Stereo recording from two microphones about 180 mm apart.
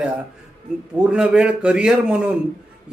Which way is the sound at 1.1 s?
5° right (ahead or behind).